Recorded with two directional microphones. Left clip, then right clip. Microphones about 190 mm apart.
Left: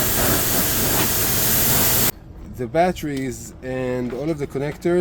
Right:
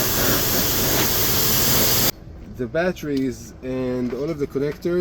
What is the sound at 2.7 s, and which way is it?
Speech, 55° left (ahead or behind).